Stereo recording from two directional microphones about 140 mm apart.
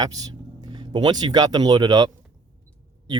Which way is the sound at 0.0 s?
25° right (ahead or behind).